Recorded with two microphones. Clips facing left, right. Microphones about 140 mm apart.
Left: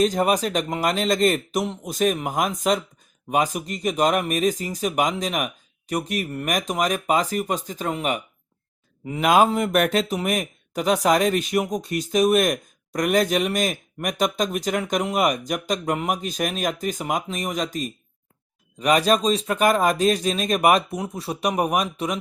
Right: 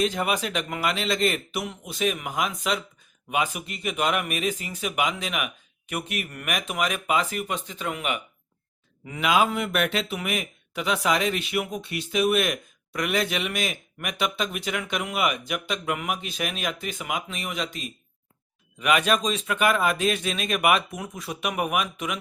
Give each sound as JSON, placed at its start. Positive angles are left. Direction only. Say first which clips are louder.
{"t": 0.0, "sound": "speech", "louder": "left 5 dB", "side_deg": 40}
{"t": 9.2, "sound": "speech", "louder": "left 5 dB", "side_deg": 45}